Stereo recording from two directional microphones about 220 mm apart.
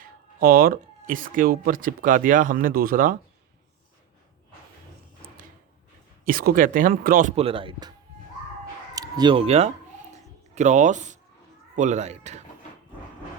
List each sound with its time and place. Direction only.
0.0 s speech: 40° right (ahead or behind)
6.2 s speech: 40° right (ahead or behind); by 7.9 s 20° right (ahead or behind)
9.0 s speech: 20° right (ahead or behind)